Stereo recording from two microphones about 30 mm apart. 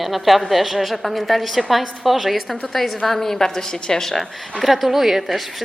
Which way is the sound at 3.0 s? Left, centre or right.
Centre.